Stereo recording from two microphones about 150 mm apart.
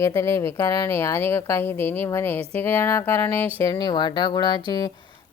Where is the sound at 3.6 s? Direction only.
25° left (ahead or behind).